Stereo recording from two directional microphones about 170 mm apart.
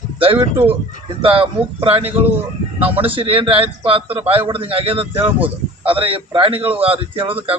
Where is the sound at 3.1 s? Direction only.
30° right (ahead or behind).